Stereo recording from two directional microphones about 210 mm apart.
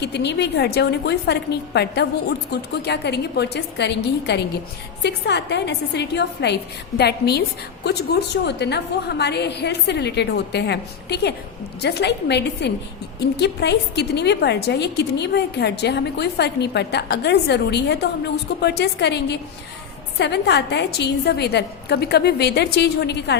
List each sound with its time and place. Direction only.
0.0 s a woman's voice: 55° left (ahead or behind)